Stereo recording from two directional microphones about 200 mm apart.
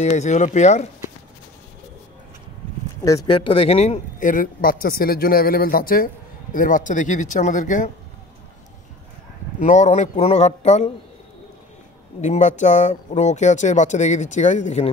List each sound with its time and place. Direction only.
0.0 s speech: 35° left (ahead or behind)
3.0 s speech: 15° left (ahead or behind)
3.5 s a man's voice: 30° left (ahead or behind)
9.6 s speech: 35° left (ahead or behind)
12.2 s speech: 35° left (ahead or behind)